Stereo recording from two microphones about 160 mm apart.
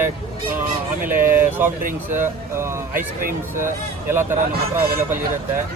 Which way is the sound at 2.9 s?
60° right (ahead or behind).